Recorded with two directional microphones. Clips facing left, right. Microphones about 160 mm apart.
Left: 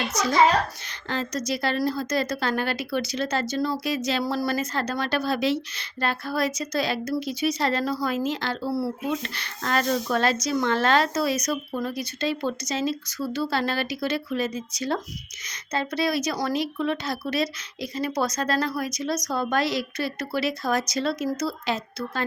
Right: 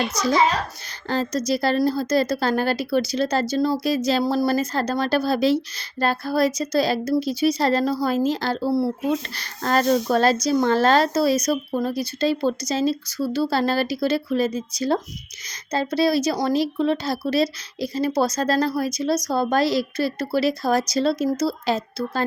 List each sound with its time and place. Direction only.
0.1 s speech: 30° right (ahead or behind)